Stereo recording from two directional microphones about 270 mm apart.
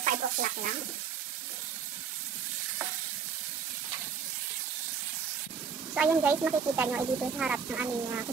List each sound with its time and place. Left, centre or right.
0.0 s speech: right
5.9 s speech: centre